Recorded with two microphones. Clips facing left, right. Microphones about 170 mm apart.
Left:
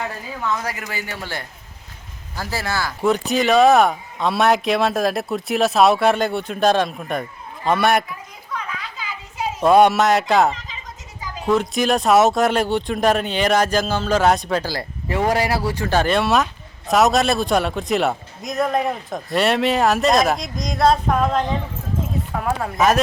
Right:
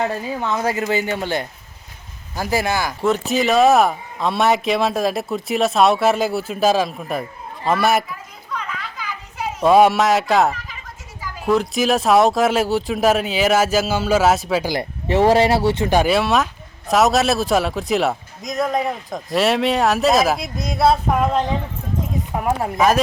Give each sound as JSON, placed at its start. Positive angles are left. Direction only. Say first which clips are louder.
{"t": 0.0, "sound": "speech", "louder": "right 5 dB", "side_deg": -25}
{"t": 3.0, "sound": "speech", "louder": "left 1 dB", "side_deg": 0}
{"t": 8.5, "sound": "a sound", "louder": "right 1 dB", "side_deg": 10}
{"t": 9.6, "sound": "speech", "louder": "even", "side_deg": 0}
{"t": 14.7, "sound": "speech", "louder": "right 5 dB", "side_deg": -25}